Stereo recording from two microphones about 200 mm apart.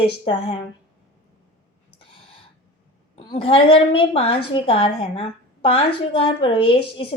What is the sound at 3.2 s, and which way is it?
A woman's voice, 25° left (ahead or behind).